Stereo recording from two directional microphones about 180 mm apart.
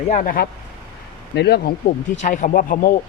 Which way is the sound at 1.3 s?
65° left (ahead or behind).